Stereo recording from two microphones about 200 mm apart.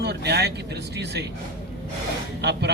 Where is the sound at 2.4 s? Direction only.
60° right (ahead or behind).